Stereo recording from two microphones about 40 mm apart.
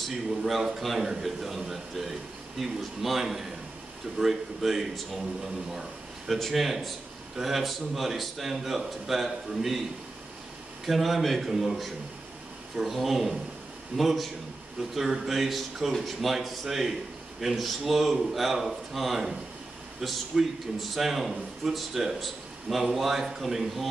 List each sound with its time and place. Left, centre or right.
0.1 s a man's voice: centre
5.8 s a sound: centre
6.4 s a man's voice: centre
10.9 s a man's voice: centre
12.9 s a man's voice: centre
20.3 s speech: centre
20.9 s a man's voice: centre